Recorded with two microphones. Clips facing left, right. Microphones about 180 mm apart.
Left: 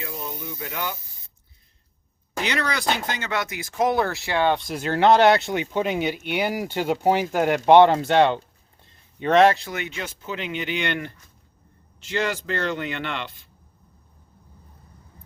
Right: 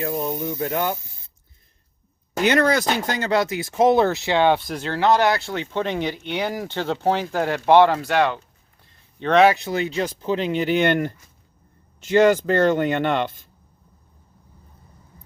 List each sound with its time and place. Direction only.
0.0 s speech: 45° right (ahead or behind)
2.4 s speech: 50° right (ahead or behind); by 4.5 s 20° right (ahead or behind)
4.5 s speech: centre (ahead or behind)
4.8 s speech: 20° left (ahead or behind)
9.1 s speech: 10° left (ahead or behind)
9.6 s speech: 30° right (ahead or behind); by 13.5 s 45° right (ahead or behind)